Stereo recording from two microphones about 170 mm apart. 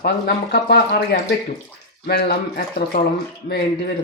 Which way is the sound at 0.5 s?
75° left (ahead or behind).